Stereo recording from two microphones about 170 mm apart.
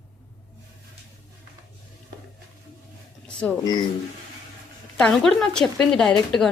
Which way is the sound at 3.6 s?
25° left (ahead or behind).